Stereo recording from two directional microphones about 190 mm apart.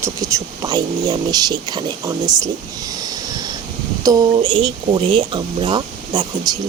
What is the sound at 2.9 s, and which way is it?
Vehicle, 20° right (ahead or behind).